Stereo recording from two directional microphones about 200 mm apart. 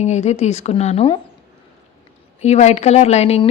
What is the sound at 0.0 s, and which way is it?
Speech, 35° left (ahead or behind).